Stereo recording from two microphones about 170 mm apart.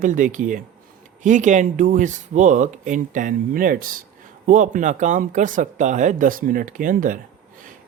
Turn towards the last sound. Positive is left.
turn(degrees=-50)  # may be behind; listen again after turning